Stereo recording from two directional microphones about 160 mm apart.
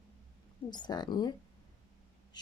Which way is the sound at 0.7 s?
25° left (ahead or behind).